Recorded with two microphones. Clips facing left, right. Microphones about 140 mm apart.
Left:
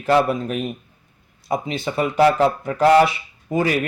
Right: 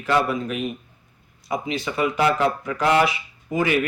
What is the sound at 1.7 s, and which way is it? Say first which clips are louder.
Speech: left 4 dB; 30° left (ahead or behind).